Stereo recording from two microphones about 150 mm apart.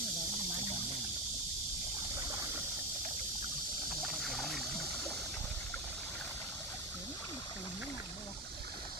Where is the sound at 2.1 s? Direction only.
20° right (ahead or behind).